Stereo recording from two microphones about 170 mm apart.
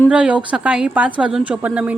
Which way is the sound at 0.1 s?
5° right (ahead or behind).